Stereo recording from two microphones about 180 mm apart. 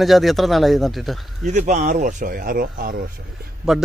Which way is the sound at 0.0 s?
Centre (ahead or behind).